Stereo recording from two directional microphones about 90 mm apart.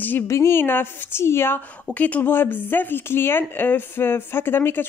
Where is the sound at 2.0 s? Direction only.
15° left (ahead or behind).